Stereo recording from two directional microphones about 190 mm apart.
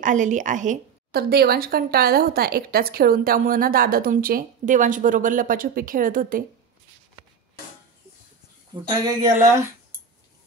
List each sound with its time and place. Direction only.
0.0 s a woman's voice: 40° right (ahead or behind)
1.3 s a woman's voice: 55° right (ahead or behind)
8.8 s speech: 25° right (ahead or behind)